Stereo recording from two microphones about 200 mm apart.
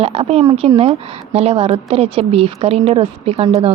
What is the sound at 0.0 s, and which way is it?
A woman's voice, 30° right (ahead or behind).